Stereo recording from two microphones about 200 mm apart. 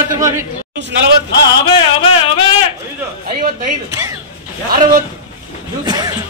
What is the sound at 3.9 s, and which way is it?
Speech, 15° right (ahead or behind).